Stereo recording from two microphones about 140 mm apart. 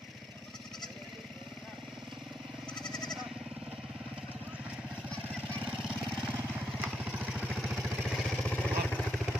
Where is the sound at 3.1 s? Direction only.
5° right (ahead or behind).